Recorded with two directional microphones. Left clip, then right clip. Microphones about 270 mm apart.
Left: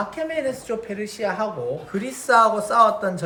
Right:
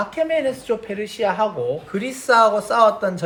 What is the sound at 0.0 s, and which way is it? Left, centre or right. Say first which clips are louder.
A woman's voice: right 5 dB; centre.